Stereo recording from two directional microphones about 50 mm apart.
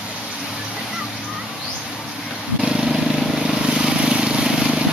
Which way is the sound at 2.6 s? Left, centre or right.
Centre.